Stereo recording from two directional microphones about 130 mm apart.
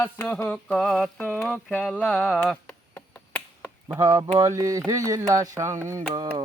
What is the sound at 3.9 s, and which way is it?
Speech, 25° right (ahead or behind).